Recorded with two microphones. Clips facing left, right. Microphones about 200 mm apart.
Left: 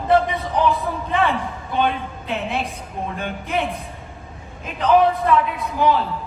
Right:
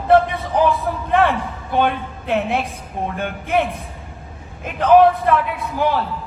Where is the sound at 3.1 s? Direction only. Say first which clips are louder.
Right 5 dB; 55° right (ahead or behind).